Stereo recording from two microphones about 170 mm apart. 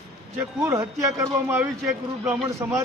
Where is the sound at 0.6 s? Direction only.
20° right (ahead or behind).